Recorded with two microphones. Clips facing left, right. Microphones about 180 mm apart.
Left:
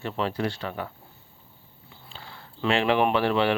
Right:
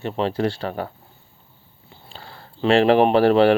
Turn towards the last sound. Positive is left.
turn(degrees=-40)  # may be behind; listen again after turning